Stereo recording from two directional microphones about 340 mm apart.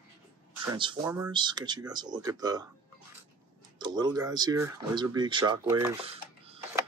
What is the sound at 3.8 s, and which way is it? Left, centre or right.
Speech, centre.